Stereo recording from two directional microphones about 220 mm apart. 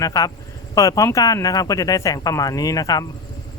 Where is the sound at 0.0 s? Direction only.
15° left (ahead or behind).